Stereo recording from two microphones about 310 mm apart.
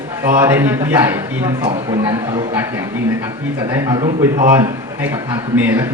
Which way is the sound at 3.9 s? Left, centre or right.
Centre.